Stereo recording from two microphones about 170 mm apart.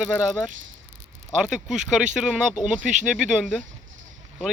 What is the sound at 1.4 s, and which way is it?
Speech, 5° right (ahead or behind).